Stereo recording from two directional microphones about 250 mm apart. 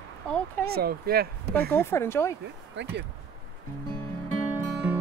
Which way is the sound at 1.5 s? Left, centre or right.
Centre.